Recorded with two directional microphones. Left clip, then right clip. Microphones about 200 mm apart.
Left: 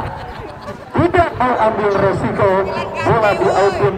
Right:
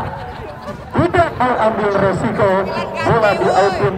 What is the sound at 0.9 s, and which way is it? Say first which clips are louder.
Speech: left 1 dB; 45° right (ahead or behind).